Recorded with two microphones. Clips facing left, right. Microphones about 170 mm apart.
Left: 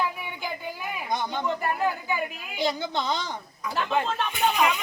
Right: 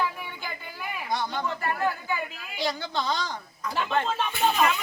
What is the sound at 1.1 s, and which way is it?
Speech, 20° left (ahead or behind).